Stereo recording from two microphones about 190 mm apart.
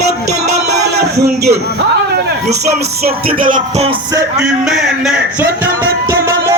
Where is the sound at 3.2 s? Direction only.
50° right (ahead or behind).